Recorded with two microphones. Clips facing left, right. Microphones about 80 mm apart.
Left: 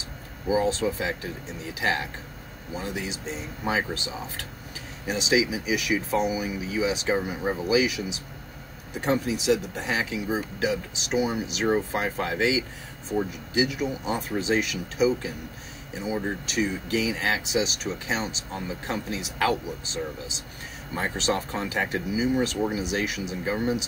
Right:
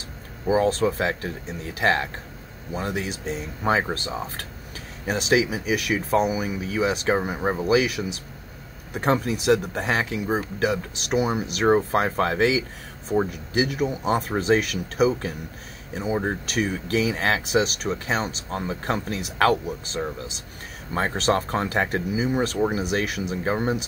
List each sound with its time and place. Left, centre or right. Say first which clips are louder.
0.5 s speech: right 3 dB; right